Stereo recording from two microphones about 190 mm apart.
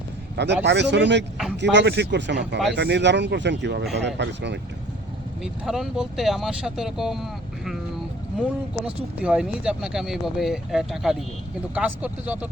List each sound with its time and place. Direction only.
0.3 s a man's voice: 65° right (ahead or behind)
5.4 s speech: centre (ahead or behind)
9.2 s speech: 5° right (ahead or behind)